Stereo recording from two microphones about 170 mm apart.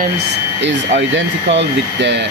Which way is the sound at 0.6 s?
90° right.